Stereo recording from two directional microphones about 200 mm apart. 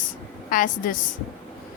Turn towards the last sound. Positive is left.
turn(degrees=40)  # may be behind; listen again after turning